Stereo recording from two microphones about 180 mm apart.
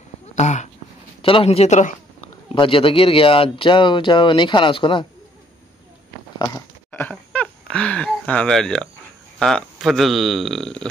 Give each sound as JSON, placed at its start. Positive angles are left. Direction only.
{"t": 0.4, "sound": "a man's voice", "side_deg": 40}
{"t": 2.5, "sound": "speech", "side_deg": 30}
{"t": 6.3, "sound": "a sound", "side_deg": 20}
{"t": 9.4, "sound": "speech", "side_deg": 0}